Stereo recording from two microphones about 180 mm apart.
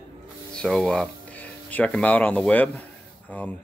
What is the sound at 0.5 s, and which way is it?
Speech, 5° left (ahead or behind).